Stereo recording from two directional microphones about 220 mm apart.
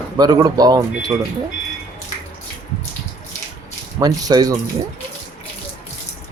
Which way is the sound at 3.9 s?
15° right (ahead or behind).